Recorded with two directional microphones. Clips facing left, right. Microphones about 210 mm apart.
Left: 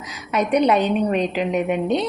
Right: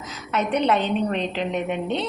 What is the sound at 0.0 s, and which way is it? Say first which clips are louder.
A woman's voice: left 3 dB; 15° left (ahead or behind).